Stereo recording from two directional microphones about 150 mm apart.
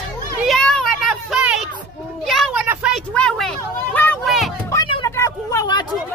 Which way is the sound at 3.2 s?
5° left (ahead or behind).